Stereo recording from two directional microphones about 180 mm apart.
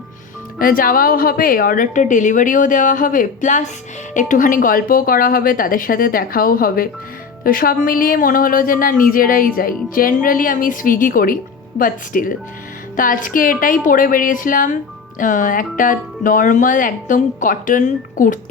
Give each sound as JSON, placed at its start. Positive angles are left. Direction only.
{"t": 0.6, "sound": "speech", "side_deg": 50}